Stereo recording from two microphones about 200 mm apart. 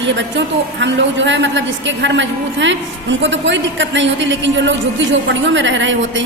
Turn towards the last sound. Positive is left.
turn(degrees=-65)  # may be behind; listen again after turning